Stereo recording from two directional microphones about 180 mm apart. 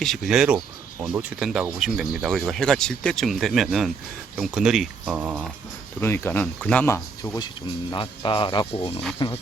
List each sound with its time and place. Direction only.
0.0 s speech: centre (ahead or behind)
6.0 s speech: 10° left (ahead or behind); by 9.0 s 35° left (ahead or behind)